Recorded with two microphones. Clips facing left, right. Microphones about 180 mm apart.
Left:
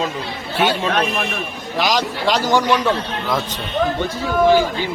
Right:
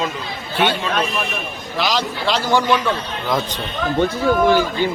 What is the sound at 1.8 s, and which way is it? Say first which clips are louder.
Speech: left 2 dB; 15° left (ahead or behind).